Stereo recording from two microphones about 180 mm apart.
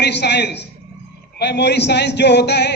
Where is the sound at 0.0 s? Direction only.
70° left (ahead or behind).